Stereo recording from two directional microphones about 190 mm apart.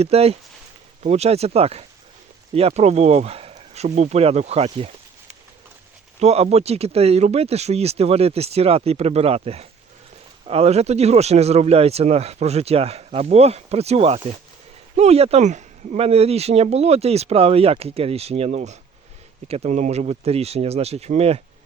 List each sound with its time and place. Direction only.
0.0 s speech: 35° right (ahead or behind)
6.1 s speech: 35° right (ahead or behind)